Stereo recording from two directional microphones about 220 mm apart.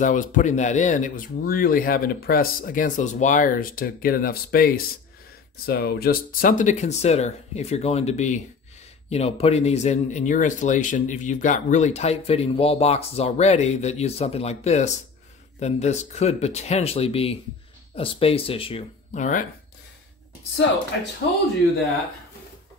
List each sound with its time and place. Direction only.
0.0 s speech: 35° left (ahead or behind)